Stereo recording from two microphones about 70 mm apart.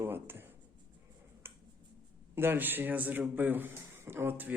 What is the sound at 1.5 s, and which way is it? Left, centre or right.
Finger snapping, right.